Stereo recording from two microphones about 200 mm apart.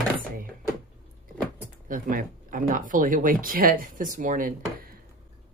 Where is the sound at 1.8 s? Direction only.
40° right (ahead or behind).